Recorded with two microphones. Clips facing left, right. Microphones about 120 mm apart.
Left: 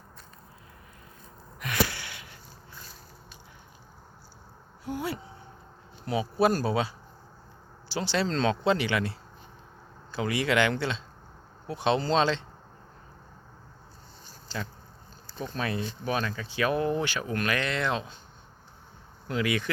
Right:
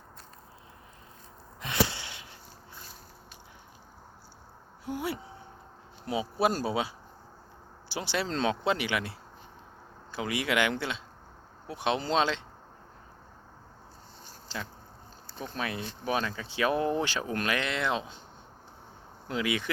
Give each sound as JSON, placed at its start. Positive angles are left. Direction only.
{"t": 1.6, "sound": "a sound", "side_deg": -25}
{"t": 4.9, "sound": "speech", "side_deg": -20}
{"t": 7.9, "sound": "speech", "side_deg": -15}
{"t": 15.4, "sound": "speech", "side_deg": -10}
{"t": 19.3, "sound": "speech", "side_deg": -20}